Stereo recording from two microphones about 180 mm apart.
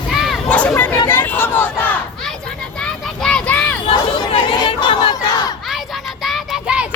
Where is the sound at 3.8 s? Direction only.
30° left (ahead or behind).